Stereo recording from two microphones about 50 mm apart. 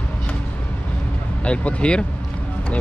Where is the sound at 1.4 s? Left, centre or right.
Left.